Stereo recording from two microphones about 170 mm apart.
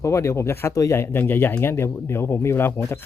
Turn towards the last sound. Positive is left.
turn(degrees=15)  # may be behind; listen again after turning